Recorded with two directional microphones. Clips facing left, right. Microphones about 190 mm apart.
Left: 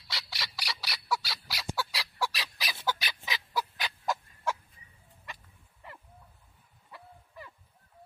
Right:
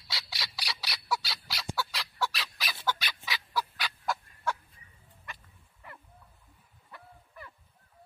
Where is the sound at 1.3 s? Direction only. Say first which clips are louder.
Even; 10° left (ahead or behind).